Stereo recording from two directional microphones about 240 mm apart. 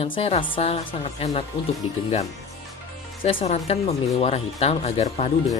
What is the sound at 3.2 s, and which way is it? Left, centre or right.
Speech, left.